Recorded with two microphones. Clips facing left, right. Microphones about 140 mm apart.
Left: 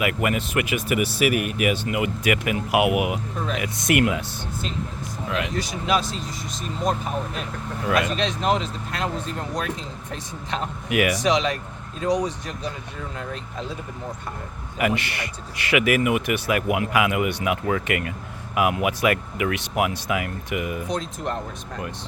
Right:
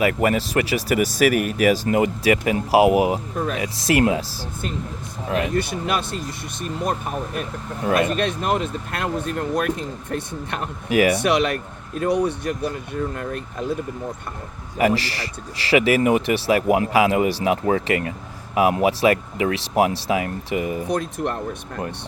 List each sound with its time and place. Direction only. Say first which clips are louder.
0.0 s speech: right 4 dB; 35° right (ahead or behind)
5.3 s speech: right 5 dB; 55° right (ahead or behind)
7.9 s speech: right 3 dB; 55° right (ahead or behind)
10.8 s speech: right 5 dB; 30° right (ahead or behind)
11.2 s speech: right 2 dB; 60° right (ahead or behind)
14.8 s speech: right 4 dB; 35° right (ahead or behind)
20.8 s speech: right 4 dB; 60° right (ahead or behind)